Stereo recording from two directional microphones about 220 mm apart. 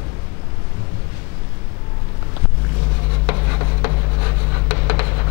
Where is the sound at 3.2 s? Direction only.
20° left (ahead or behind).